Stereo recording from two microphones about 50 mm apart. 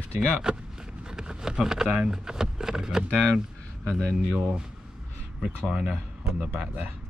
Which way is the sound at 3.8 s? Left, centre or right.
Centre.